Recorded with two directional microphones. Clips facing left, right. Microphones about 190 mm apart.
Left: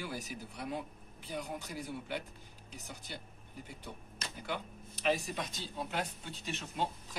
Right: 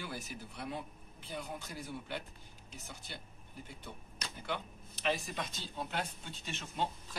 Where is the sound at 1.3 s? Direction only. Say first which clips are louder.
Left 2 dB; 15° left (ahead or behind).